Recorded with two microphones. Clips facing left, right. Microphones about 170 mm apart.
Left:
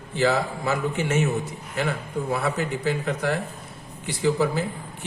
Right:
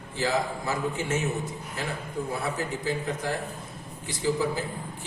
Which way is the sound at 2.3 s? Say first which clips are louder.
Left 7 dB; 70° left (ahead or behind).